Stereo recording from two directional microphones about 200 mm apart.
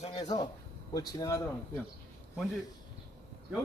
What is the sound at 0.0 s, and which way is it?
Speech, 35° left (ahead or behind).